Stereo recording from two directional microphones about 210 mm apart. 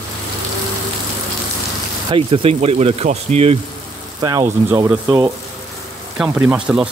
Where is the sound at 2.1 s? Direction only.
25° right (ahead or behind).